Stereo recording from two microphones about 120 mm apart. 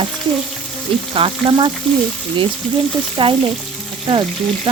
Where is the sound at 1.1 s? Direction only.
50° right (ahead or behind).